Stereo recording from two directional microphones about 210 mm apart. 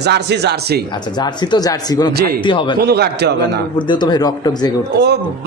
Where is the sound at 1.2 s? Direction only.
20° left (ahead or behind).